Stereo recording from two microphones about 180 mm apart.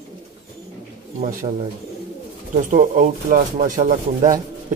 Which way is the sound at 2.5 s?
45° right (ahead or behind).